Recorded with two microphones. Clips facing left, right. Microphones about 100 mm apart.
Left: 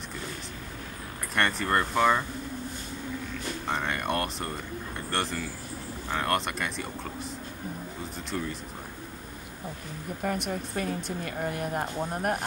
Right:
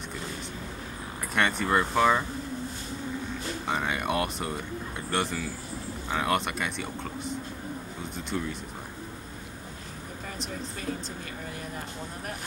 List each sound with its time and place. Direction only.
1.3 s speech: centre (ahead or behind)
3.6 s speech: 5° right (ahead or behind)
10.2 s speech: 60° left (ahead or behind)